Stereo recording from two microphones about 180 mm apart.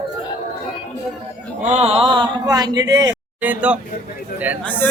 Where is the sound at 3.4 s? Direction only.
10° right (ahead or behind).